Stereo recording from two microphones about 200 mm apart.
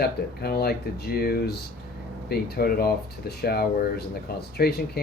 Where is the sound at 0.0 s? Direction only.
50° left (ahead or behind).